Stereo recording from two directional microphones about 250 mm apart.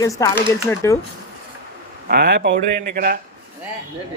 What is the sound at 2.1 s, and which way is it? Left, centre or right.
Speech, right.